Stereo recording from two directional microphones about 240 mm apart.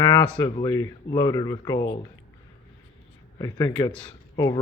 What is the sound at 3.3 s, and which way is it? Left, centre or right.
Speech, centre.